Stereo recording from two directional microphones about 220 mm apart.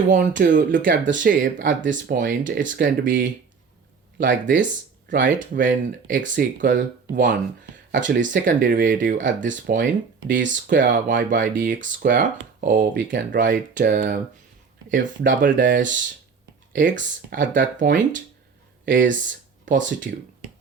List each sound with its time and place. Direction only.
0.1 s speech: 35° right (ahead or behind)